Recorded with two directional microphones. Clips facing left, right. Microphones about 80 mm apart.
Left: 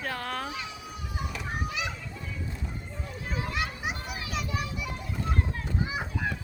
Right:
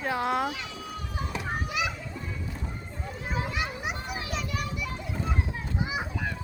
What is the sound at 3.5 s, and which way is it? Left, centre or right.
Children playing, centre.